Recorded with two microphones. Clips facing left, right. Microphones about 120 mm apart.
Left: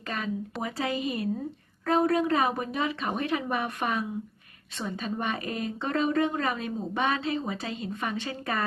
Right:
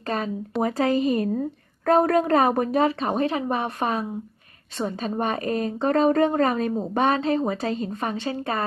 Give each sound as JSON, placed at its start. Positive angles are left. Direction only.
{"t": 0.6, "sound": "speech", "side_deg": -45}